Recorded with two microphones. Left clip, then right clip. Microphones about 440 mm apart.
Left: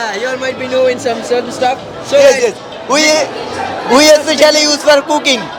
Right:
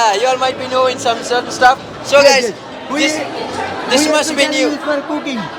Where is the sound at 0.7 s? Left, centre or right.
Right.